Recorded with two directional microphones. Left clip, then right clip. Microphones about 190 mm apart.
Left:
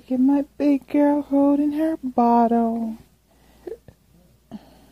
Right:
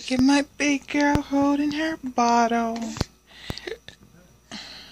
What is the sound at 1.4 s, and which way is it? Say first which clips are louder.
Mantra: left 3 dB; 45° left (ahead or behind).